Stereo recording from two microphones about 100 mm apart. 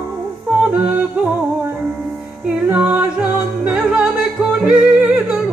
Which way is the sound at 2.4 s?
15° right (ahead or behind).